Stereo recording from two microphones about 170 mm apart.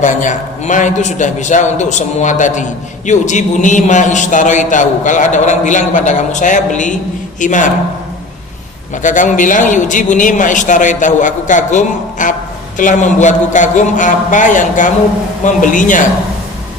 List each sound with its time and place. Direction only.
0.0 s a man's voice: 45° left (ahead or behind)
9.0 s a man's voice: 50° left (ahead or behind)